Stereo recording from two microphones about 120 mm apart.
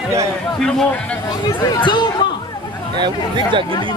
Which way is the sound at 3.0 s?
40° right (ahead or behind).